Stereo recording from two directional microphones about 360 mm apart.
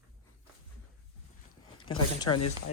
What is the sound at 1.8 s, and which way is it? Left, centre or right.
Speech, centre.